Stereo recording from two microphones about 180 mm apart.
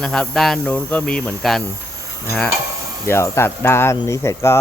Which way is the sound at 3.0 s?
15° left (ahead or behind).